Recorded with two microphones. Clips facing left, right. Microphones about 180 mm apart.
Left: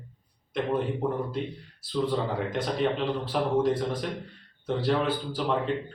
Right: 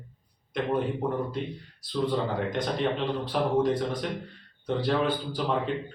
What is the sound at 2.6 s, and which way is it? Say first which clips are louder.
Speech: left 3 dB; centre (ahead or behind).